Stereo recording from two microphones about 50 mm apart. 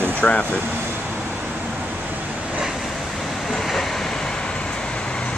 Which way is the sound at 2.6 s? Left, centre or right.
Centre.